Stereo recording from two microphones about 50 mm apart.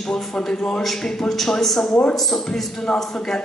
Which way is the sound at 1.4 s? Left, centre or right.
Centre.